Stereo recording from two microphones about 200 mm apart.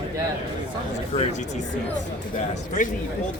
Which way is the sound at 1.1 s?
35° left (ahead or behind).